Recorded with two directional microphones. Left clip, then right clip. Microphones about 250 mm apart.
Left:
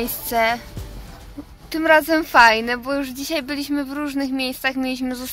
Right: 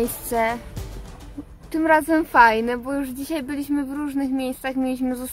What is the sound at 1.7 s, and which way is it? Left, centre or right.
Speech, centre.